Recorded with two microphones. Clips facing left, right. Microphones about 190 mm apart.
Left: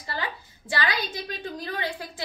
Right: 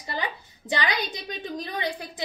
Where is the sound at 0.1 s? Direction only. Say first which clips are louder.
Right 1 dB; 20° right (ahead or behind).